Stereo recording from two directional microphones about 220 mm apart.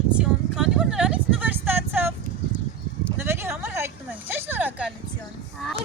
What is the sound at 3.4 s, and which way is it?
Speech, 10° right (ahead or behind).